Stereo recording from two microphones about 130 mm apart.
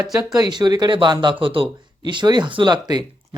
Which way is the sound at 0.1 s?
25° right (ahead or behind).